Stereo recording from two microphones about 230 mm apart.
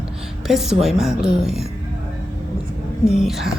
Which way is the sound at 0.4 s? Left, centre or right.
Centre.